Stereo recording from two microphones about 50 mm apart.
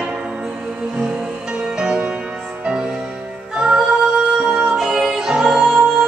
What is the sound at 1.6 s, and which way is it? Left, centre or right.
Music, centre.